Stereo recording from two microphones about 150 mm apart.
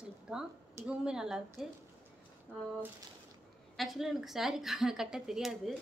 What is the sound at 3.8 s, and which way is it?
A woman's voice, centre (ahead or behind).